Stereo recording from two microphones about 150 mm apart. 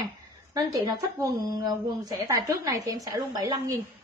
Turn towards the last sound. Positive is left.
turn(degrees=-25)  # may be behind; listen again after turning